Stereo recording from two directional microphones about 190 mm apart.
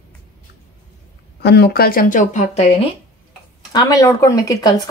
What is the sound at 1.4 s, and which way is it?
Speech, 60° left (ahead or behind).